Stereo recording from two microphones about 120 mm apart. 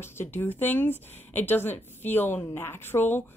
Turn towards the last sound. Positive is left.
turn(degrees=15)  # may be behind; listen again after turning